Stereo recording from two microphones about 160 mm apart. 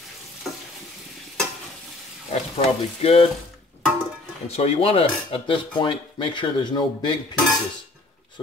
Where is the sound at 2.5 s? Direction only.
40° left (ahead or behind).